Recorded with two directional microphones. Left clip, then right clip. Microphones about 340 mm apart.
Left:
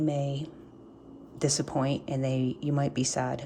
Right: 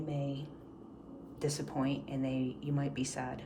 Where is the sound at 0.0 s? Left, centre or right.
Centre.